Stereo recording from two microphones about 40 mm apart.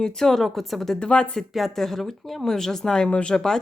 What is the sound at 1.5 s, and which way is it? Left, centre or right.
Speech, centre.